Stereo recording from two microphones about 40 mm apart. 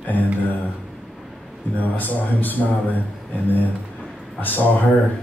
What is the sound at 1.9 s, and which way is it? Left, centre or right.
Speech, left.